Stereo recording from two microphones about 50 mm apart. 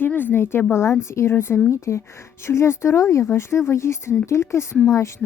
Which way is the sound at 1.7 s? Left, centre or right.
Left.